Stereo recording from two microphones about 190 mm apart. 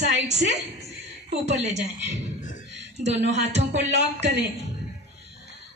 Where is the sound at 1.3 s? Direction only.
35° right (ahead or behind).